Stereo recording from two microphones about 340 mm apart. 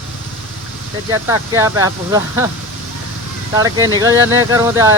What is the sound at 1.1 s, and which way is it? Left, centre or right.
Speech, centre.